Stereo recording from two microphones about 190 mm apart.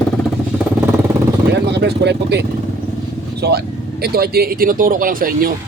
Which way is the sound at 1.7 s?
60° right (ahead or behind).